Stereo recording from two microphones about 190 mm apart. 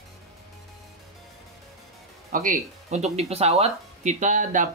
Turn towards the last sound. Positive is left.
turn(degrees=-40)  # may be behind; listen again after turning